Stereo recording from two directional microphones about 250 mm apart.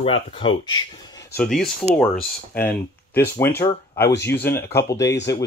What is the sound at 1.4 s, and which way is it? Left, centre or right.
Speech, centre.